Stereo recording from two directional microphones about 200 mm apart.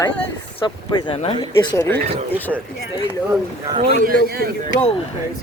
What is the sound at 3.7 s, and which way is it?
Speech, 35° right (ahead or behind).